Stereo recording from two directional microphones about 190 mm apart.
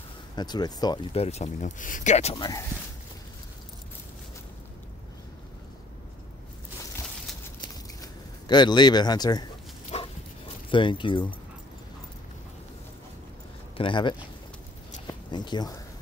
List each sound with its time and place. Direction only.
0.4 s speech: 20° left (ahead or behind); by 2.3 s 35° left (ahead or behind)
2.3 s speech: 20° left (ahead or behind)
8.0 s speech: 20° left (ahead or behind)
9.9 s dog: 35° left (ahead or behind)
10.7 s speech: 25° left (ahead or behind)
13.7 s speech: 25° left (ahead or behind)
15.3 s speech: 25° left (ahead or behind)